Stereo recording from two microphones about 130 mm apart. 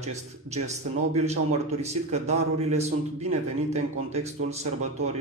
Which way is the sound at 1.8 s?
60° right (ahead or behind).